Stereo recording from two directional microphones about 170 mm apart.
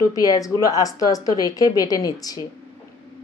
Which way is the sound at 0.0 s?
20° left (ahead or behind).